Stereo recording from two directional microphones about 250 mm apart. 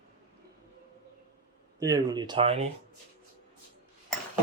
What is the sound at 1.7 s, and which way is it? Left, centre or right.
Speech, centre.